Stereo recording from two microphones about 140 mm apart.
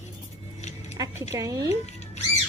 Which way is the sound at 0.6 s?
55° left (ahead or behind).